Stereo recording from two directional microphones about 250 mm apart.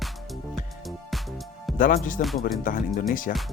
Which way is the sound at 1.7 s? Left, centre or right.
Left.